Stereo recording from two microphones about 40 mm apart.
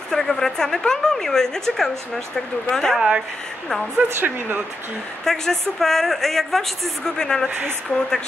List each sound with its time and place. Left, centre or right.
0.1 s a woman's voice: centre
3.9 s speech: right
5.2 s a woman's voice: centre
7.2 s speech: centre